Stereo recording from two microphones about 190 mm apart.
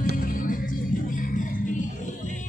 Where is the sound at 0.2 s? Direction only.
45° left (ahead or behind).